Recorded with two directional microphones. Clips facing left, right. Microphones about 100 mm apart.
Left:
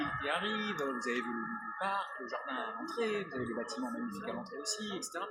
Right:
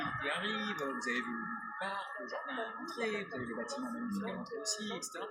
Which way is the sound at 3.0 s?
40° left (ahead or behind).